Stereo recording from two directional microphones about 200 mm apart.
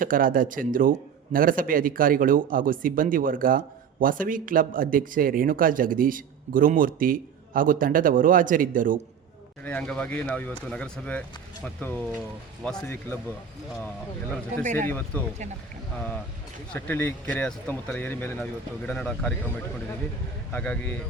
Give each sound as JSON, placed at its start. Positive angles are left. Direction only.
{"t": 0.0, "sound": "speech", "side_deg": -45}
{"t": 9.6, "sound": "speech", "side_deg": 5}
{"t": 14.6, "sound": "speech", "side_deg": -40}
{"t": 14.8, "sound": "speech", "side_deg": 10}
{"t": 16.7, "sound": "speech", "side_deg": 10}
{"t": 20.5, "sound": "speech", "side_deg": 5}